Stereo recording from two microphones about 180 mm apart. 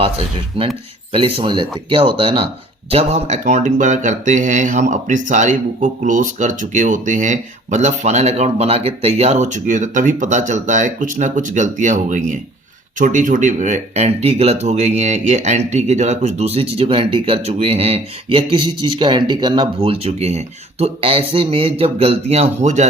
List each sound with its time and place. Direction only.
0.6 s speech: 30° right (ahead or behind)